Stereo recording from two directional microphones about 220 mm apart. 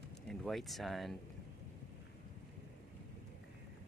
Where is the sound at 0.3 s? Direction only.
Centre (ahead or behind).